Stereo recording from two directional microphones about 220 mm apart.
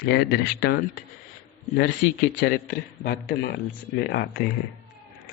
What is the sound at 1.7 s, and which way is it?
A man's voice, 50° left (ahead or behind).